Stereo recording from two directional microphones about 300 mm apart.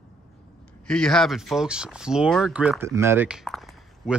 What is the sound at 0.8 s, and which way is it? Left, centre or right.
Speech, centre.